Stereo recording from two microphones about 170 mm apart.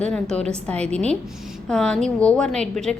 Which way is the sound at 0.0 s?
5° left (ahead or behind).